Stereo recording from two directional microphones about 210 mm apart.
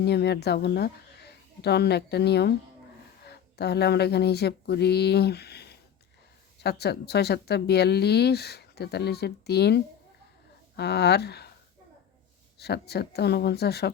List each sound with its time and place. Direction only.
0.0 s speech: 50° left (ahead or behind)
12.5 s speech: 50° left (ahead or behind)